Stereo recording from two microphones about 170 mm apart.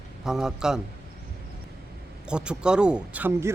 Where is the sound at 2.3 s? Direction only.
5° right (ahead or behind).